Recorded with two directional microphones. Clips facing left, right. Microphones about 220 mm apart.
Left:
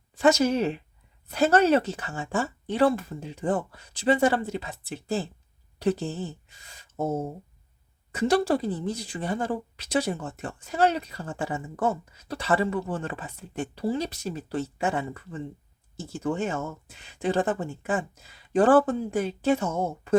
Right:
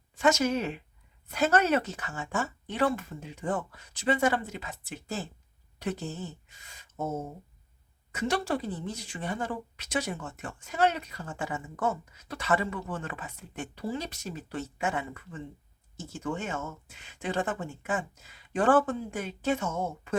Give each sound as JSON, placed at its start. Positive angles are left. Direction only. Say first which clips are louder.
{"t": 0.2, "sound": "a woman's voice", "louder": "left 4 dB", "side_deg": 35}